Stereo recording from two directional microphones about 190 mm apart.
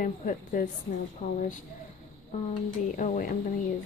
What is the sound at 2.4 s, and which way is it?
Speech, 40° left (ahead or behind).